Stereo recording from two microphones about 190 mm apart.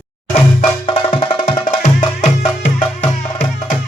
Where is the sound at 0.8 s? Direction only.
25° left (ahead or behind).